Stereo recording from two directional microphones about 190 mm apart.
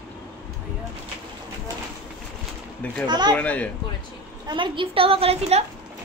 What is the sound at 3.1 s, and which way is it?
Speech, 20° right (ahead or behind).